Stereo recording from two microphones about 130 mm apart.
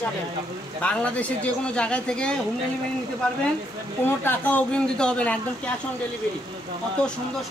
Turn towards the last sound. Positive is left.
turn(degrees=10)  # may be behind; listen again after turning